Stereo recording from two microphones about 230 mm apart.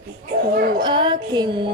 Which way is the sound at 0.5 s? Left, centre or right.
Right.